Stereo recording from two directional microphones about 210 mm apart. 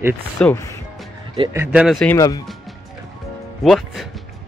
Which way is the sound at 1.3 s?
20° right (ahead or behind).